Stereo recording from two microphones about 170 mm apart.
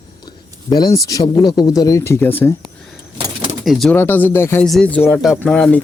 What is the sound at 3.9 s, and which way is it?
Speech, 10° left (ahead or behind).